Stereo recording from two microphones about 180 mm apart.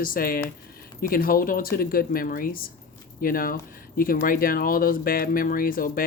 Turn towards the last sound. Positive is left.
turn(degrees=50)  # may be behind; listen again after turning